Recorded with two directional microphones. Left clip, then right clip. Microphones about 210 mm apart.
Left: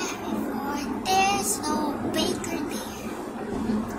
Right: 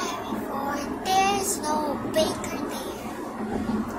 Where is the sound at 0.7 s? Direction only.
25° right (ahead or behind).